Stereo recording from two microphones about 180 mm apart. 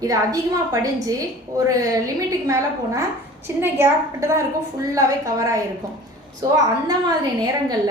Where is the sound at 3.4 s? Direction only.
15° right (ahead or behind).